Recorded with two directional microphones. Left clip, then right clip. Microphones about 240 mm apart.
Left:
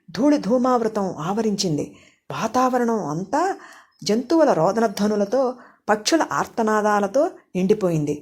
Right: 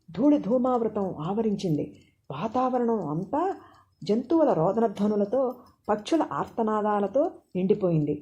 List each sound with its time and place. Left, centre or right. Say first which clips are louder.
0.1 s speech: left 4 dB; left